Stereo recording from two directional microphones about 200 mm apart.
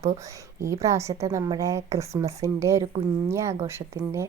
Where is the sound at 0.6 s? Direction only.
15° right (ahead or behind).